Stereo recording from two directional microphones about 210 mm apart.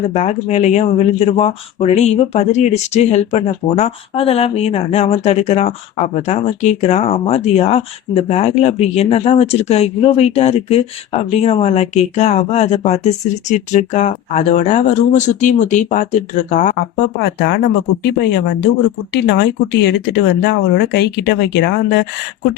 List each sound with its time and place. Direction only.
0.1 s speech: 30° left (ahead or behind)
17.2 s speech: 55° left (ahead or behind)